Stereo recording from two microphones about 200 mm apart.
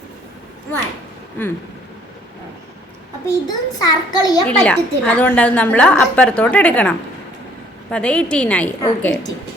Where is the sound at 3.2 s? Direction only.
20° left (ahead or behind).